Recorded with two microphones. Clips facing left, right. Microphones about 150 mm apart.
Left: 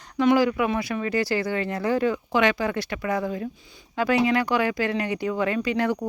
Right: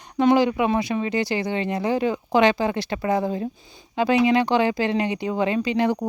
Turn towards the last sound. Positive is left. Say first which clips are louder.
# right 2 dB
turn(degrees=-25)  # may be behind; listen again after turning